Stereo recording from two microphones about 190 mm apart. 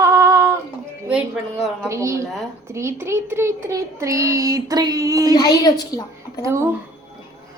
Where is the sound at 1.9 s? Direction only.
15° right (ahead or behind).